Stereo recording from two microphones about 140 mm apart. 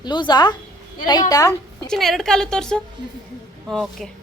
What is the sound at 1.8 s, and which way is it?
A woman's voice, centre (ahead or behind).